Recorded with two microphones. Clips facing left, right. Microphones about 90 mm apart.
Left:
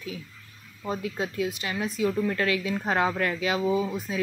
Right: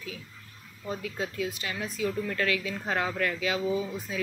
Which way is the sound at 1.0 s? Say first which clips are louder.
Left 3 dB; 25° left (ahead or behind).